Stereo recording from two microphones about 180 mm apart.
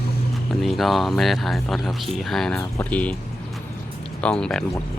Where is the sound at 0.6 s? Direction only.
Centre (ahead or behind).